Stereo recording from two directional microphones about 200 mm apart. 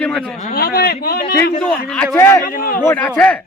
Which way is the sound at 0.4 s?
45° left (ahead or behind).